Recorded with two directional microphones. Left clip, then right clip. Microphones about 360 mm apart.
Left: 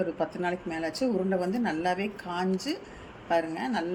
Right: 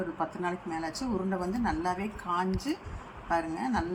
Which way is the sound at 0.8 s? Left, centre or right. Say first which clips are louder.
Left 5 dB; centre.